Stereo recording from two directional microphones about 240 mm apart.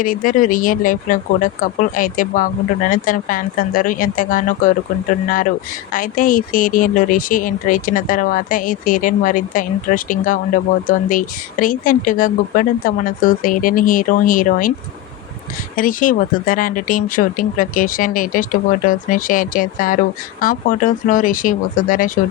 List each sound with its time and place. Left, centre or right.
0.0 s a woman's voice: left
5.9 s a woman's voice: left
15.7 s a woman's voice: left